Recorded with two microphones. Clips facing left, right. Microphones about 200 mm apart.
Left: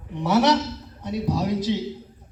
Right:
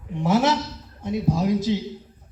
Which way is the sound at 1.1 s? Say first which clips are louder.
Right 2 dB; 50° right (ahead or behind).